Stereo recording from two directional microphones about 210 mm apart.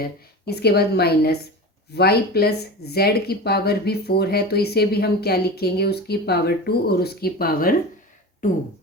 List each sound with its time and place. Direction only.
0.0 s speech: 50° left (ahead or behind)